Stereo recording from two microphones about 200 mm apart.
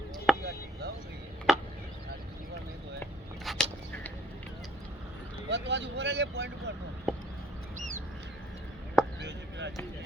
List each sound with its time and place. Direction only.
0.3 s chop: centre (ahead or behind)
1.5 s chop: centre (ahead or behind)
3.4 s a sound: centre (ahead or behind)
5.5 s speech: 60° right (ahead or behind)
7.1 s a sound: centre (ahead or behind)
9.2 s chop: 60° right (ahead or behind)